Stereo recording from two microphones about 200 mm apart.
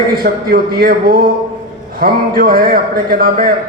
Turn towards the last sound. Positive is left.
turn(degrees=-45)  # may be behind; listen again after turning